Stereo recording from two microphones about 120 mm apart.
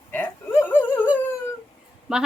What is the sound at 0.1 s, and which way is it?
Dog, 15° left (ahead or behind).